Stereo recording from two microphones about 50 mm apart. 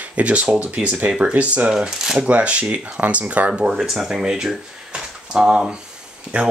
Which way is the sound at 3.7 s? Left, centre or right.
Centre.